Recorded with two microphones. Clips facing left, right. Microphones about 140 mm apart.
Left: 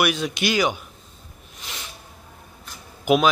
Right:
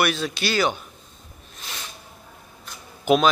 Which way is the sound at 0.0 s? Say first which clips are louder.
Left 1 dB; 15° left (ahead or behind).